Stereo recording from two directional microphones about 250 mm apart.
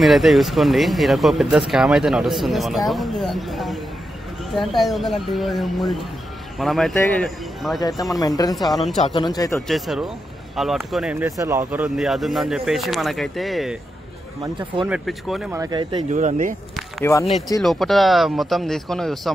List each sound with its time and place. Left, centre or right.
0.0 s speech: centre
7.8 s speech: centre
8.6 s speech: centre
8.9 s speech: left
9.7 s speech: centre
14.9 s speech: centre
15.6 s speech: centre
16.1 s speech: right
17.6 s speech: centre